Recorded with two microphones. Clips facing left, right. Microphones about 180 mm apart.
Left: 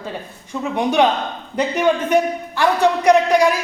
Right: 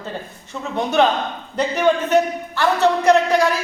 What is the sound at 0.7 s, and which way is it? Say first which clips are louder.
A man's voice: left 1 dB; 15° left (ahead or behind).